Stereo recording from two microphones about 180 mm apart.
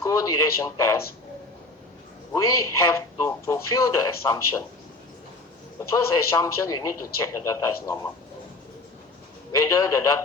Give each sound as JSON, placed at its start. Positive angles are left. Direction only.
{"t": 0.0, "sound": "speech", "side_deg": 15}
{"t": 2.3, "sound": "speech", "side_deg": 15}
{"t": 6.3, "sound": "speech", "side_deg": 15}
{"t": 9.6, "sound": "speech", "side_deg": 15}